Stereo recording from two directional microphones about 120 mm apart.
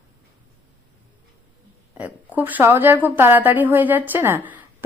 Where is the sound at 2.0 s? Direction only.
10° right (ahead or behind).